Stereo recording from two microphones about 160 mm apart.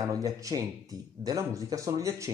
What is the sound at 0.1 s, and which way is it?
Speech, 20° right (ahead or behind).